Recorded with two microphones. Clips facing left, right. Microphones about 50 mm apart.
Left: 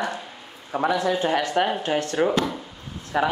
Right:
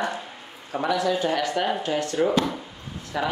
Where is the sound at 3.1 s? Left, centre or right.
Left.